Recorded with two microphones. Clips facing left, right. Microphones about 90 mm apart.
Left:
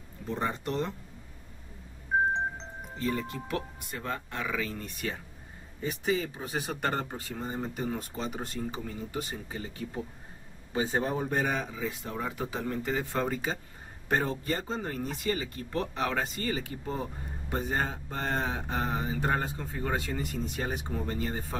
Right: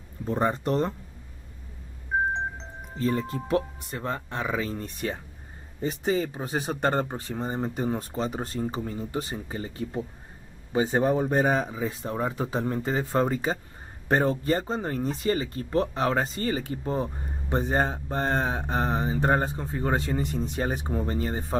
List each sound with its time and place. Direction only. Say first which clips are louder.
0.3 s speech: right 7 dB; 40° right (ahead or behind)
2.3 s music: right 1 dB; centre (ahead or behind)
3.0 s speech: right 5 dB; 35° right (ahead or behind)